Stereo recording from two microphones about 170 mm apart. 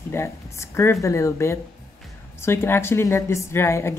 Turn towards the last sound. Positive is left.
turn(degrees=15)  # may be behind; listen again after turning